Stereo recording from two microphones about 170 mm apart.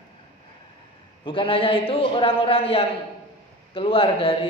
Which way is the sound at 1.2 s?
30° left (ahead or behind).